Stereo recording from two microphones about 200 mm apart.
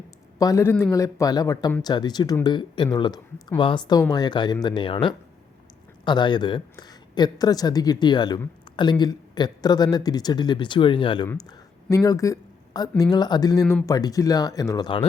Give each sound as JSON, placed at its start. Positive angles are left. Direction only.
{"t": 0.3, "sound": "speech", "side_deg": 15}